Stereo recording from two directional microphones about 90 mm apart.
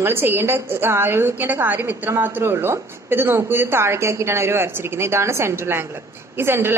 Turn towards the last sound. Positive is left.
turn(degrees=-25)  # may be behind; listen again after turning